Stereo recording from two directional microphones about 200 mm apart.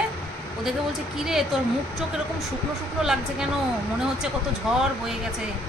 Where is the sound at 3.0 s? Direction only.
Centre (ahead or behind).